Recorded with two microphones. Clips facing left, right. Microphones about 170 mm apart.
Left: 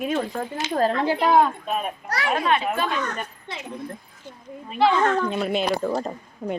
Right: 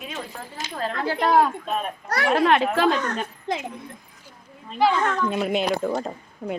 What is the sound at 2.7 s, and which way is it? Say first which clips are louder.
Speech: right 5 dB; 90° right.